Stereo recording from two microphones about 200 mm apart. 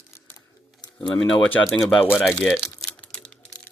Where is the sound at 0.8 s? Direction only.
20° left (ahead or behind).